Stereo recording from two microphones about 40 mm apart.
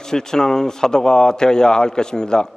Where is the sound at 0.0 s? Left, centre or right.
Centre.